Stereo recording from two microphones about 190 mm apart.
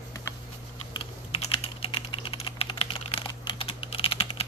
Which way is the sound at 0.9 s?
30° left (ahead or behind).